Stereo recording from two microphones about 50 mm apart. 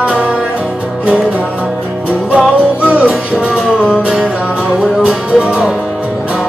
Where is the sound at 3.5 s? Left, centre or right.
Centre.